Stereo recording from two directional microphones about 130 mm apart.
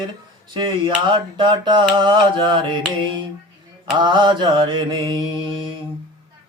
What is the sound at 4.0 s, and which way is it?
Mantra, 35° right (ahead or behind).